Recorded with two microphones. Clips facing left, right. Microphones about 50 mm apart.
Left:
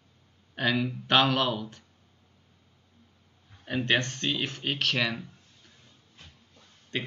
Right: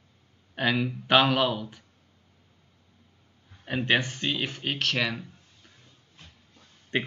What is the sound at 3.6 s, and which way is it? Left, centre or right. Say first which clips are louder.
Speech: right 1 dB; centre.